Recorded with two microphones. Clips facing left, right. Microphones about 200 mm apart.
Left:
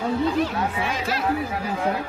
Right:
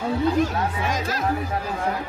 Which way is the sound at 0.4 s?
45° right (ahead or behind).